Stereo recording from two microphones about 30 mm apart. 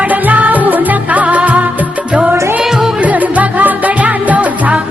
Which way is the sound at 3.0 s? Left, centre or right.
Right.